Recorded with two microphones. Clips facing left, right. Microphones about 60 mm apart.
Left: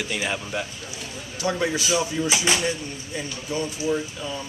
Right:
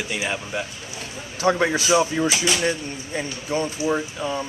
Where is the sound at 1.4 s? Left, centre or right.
Right.